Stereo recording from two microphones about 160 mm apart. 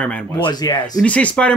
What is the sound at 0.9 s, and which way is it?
Speech, 10° left (ahead or behind).